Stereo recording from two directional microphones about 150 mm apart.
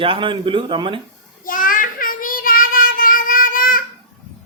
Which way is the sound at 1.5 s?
65° left (ahead or behind).